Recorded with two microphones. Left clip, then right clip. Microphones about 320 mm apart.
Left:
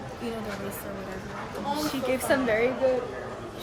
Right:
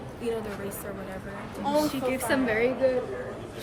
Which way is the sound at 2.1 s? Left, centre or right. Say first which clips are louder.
Left 2 dB; centre.